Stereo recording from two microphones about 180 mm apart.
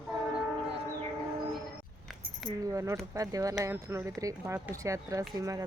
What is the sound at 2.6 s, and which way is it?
Speech, 15° right (ahead or behind).